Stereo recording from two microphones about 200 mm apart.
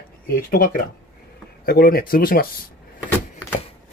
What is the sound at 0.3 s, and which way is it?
Speech, 45° left (ahead or behind).